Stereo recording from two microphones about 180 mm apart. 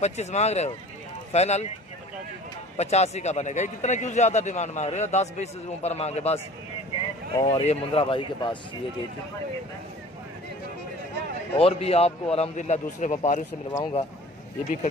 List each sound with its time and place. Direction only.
0.0 s a man's voice: 40° left (ahead or behind)
2.8 s a man's voice: 35° left (ahead or behind)
7.3 s speech: 20° left (ahead or behind)
7.6 s speech: 35° left (ahead or behind)
11.5 s a man's voice: 35° left (ahead or behind)
13.7 s speech: 25° left (ahead or behind)